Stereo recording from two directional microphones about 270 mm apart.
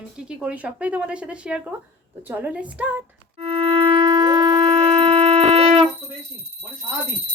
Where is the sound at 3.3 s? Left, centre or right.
Right.